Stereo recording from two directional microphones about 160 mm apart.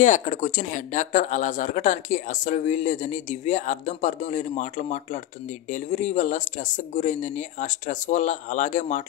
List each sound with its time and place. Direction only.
0.0 s speech: 50° left (ahead or behind)